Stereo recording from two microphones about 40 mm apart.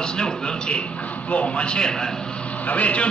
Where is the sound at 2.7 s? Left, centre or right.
Left.